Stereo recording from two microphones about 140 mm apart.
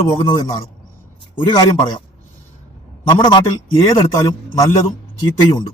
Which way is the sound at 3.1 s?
30° left (ahead or behind).